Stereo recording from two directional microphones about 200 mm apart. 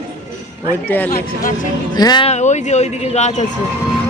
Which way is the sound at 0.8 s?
10° left (ahead or behind).